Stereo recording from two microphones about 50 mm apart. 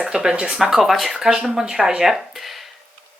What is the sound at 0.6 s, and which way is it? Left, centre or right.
A woman's voice, centre.